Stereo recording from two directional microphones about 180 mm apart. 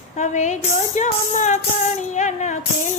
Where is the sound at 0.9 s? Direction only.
40° left (ahead or behind).